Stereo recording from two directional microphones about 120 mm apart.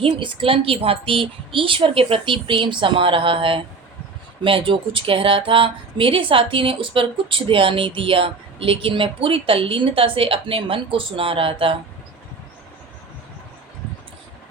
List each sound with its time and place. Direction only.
0.0 s speech: 50° right (ahead or behind)